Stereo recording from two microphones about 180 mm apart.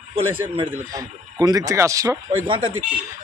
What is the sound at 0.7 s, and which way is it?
Speech, 20° right (ahead or behind).